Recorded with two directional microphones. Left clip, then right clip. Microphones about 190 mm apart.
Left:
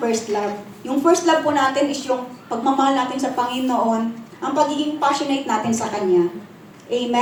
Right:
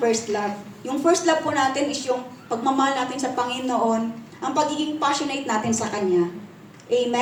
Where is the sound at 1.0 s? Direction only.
40° right (ahead or behind).